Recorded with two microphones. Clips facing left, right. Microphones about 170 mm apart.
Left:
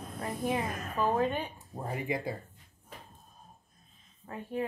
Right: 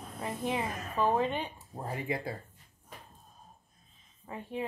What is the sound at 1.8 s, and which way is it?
Speech, 20° left (ahead or behind).